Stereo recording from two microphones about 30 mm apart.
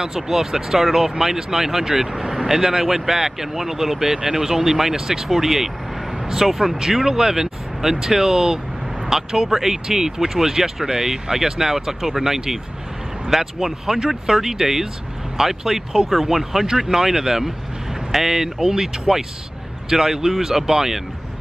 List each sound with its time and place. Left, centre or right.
0.0 s speech: centre
6.1 s vehicle: centre
6.4 s speech: centre
13.9 s speech: right
14.3 s speech: centre